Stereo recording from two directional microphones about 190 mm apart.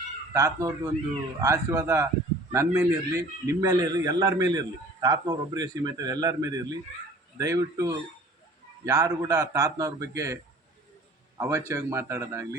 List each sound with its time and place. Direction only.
0.3 s a man's voice: 15° right (ahead or behind)
11.3 s a man's voice: 15° right (ahead or behind)